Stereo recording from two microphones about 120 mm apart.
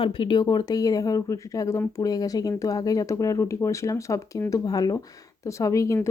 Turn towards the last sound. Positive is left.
turn(degrees=25)  # may be behind; listen again after turning